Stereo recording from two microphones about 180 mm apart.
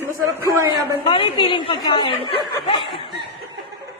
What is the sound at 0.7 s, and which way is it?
Speech, 30° left (ahead or behind).